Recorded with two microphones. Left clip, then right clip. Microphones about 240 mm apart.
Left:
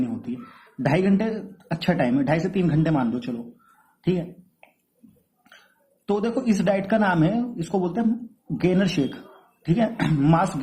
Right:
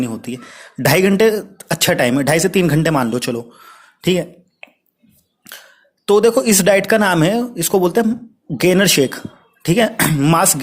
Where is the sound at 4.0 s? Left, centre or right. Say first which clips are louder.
Right 9 dB; right.